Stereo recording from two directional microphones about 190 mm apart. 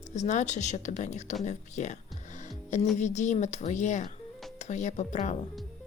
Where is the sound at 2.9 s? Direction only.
40° left (ahead or behind).